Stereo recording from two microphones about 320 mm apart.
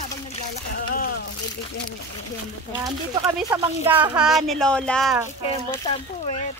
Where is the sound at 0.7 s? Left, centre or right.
Left.